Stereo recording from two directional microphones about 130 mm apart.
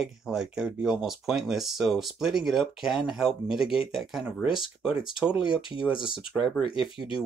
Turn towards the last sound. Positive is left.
turn(degrees=-5)  # may be behind; listen again after turning